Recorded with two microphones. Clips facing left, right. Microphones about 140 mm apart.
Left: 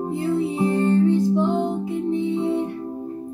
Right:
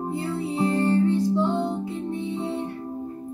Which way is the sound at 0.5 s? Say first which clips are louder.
Right 1 dB; 20° left (ahead or behind).